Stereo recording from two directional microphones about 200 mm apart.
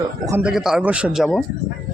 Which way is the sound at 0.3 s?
5° right (ahead or behind).